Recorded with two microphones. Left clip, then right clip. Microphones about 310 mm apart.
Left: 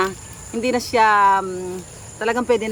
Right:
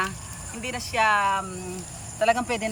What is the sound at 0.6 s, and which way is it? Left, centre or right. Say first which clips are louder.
Speech: left 7 dB; centre.